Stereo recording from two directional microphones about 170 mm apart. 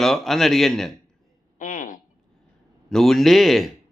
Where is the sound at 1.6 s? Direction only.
50° left (ahead or behind).